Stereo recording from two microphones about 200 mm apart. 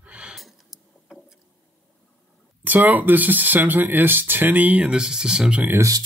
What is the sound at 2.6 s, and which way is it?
Speech, 10° right (ahead or behind).